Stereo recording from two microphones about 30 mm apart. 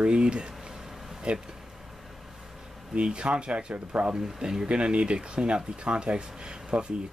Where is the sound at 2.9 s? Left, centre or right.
Right.